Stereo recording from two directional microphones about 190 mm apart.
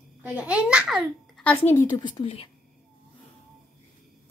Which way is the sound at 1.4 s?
10° left (ahead or behind).